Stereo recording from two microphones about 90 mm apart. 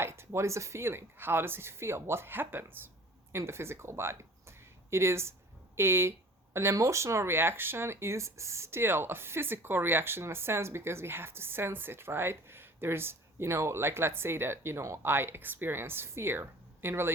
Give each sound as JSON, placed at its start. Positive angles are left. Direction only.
{"t": 0.0, "sound": "speech", "side_deg": -30}